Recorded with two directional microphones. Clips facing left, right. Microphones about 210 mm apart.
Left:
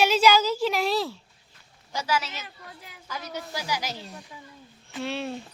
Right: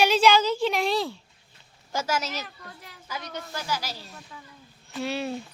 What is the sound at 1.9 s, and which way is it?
Speech, 45° right (ahead or behind).